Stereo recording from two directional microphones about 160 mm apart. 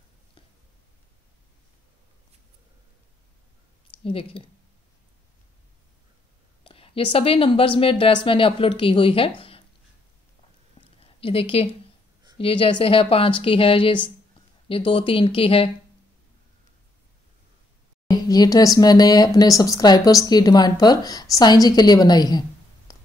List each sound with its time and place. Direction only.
3.8 s speech: 35° left (ahead or behind)
6.6 s a woman's voice: 35° left (ahead or behind)
10.8 s a sound: 35° left (ahead or behind)
12.4 s a woman's voice: 35° left (ahead or behind)
18.3 s speech: 25° left (ahead or behind)
22.9 s a sound: 25° left (ahead or behind)